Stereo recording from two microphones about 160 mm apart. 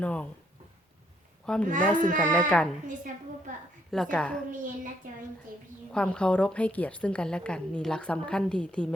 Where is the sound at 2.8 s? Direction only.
55° right (ahead or behind).